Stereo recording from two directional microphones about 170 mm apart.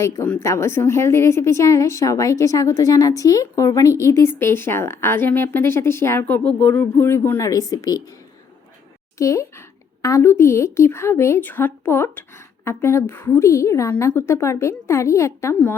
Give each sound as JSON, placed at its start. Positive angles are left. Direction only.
{"t": 0.0, "sound": "a woman's voice", "side_deg": 15}
{"t": 9.1, "sound": "a woman's voice", "side_deg": 20}